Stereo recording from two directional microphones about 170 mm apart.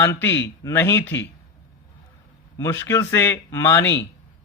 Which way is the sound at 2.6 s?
15° left (ahead or behind).